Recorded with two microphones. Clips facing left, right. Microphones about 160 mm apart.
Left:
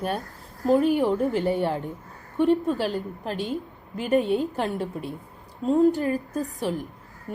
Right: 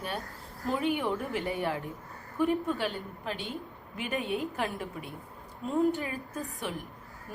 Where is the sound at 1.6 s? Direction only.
Centre (ahead or behind).